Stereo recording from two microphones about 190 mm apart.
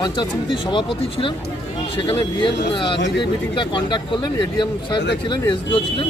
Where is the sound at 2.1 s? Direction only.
25° left (ahead or behind).